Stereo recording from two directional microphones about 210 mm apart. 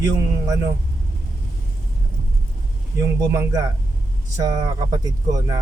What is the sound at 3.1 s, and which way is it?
Speech, 15° right (ahead or behind).